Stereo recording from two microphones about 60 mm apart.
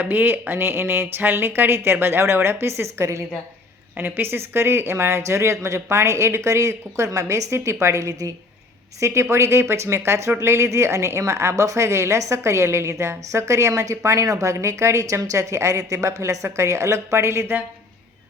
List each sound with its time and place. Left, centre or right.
0.0 s speech: right
3.9 s a woman's voice: right